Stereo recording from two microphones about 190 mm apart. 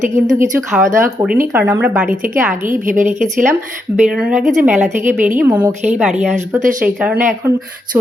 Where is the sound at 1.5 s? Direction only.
10° right (ahead or behind).